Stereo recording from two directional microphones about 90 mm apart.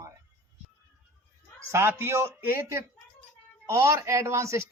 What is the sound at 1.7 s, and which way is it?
A man's voice, 25° right (ahead or behind).